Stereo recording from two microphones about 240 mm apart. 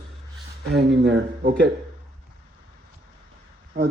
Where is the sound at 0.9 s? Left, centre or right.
Right.